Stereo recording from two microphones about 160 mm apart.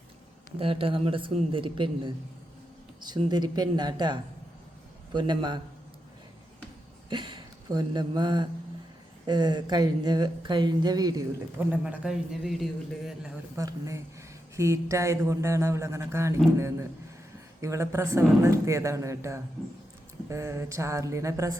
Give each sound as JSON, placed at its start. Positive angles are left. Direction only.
{"t": 0.6, "sound": "speech", "side_deg": -35}
{"t": 7.1, "sound": "speech", "side_deg": -30}
{"t": 11.5, "sound": "a man's voice", "side_deg": -10}
{"t": 13.6, "sound": "speech", "side_deg": -20}
{"t": 17.6, "sound": "speech", "side_deg": -20}